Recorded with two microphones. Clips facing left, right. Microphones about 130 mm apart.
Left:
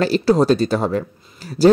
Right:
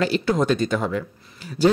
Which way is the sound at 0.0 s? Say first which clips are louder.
Left 5 dB; 35° left (ahead or behind).